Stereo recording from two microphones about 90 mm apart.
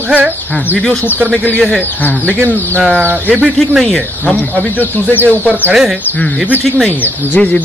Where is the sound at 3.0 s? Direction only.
15° right (ahead or behind).